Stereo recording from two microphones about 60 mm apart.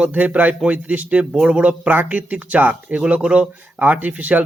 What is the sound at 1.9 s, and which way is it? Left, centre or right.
A man's voice, right.